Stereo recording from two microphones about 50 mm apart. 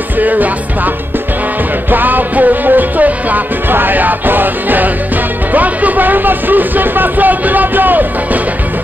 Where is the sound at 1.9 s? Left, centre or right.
Right.